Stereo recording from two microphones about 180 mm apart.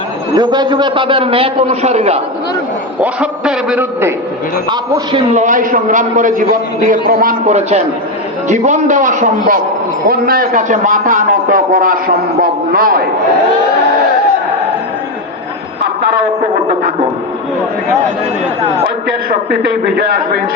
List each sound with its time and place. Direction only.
0.3 s a man's voice: 25° right (ahead or behind)
3.0 s a man's voice: 5° right (ahead or behind)
4.7 s a man's voice: 30° right (ahead or behind)
5.4 s a man's voice: 45° right (ahead or behind)
19.3 s a man's voice: 65° right (ahead or behind)